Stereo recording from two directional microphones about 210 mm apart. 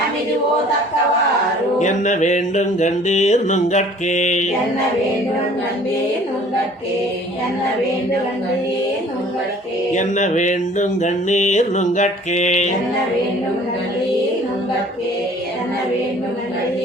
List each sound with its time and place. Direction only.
1.8 s music: 35° left (ahead or behind)
9.9 s music: 35° left (ahead or behind)